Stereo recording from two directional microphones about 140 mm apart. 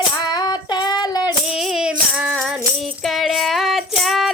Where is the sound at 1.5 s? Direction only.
5° right (ahead or behind).